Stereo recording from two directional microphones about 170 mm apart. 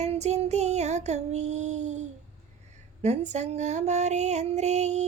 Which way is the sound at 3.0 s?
40° right (ahead or behind).